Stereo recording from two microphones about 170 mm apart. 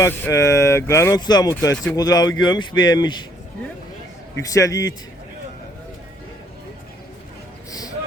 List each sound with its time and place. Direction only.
0.0 s speech: 15° left (ahead or behind)
4.4 s speech: 20° left (ahead or behind)
7.7 s a sound: 20° left (ahead or behind)